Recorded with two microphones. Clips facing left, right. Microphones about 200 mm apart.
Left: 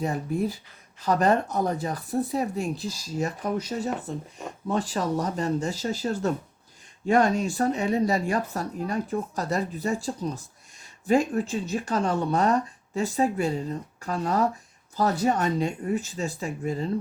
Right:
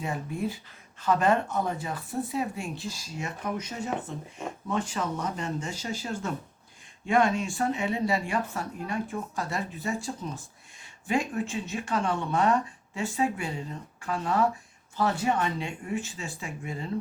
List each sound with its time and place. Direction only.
0.0 s speech: 40° left (ahead or behind)